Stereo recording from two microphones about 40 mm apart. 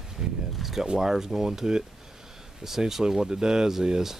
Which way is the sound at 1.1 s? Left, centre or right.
Centre.